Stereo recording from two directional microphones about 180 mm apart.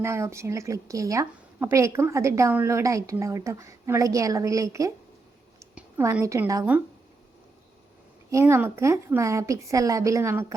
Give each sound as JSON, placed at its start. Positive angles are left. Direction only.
{"t": 0.0, "sound": "a woman's voice", "side_deg": -15}
{"t": 8.3, "sound": "a woman's voice", "side_deg": -15}